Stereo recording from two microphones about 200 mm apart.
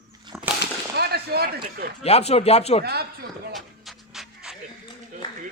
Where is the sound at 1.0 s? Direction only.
50° right (ahead or behind).